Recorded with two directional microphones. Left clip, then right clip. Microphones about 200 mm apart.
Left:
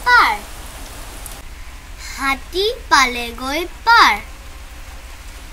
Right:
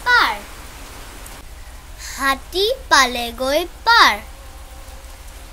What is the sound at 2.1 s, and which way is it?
A child's voice, 50° right (ahead or behind).